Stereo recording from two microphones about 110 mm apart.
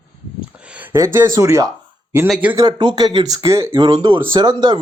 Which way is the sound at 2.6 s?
45° right (ahead or behind).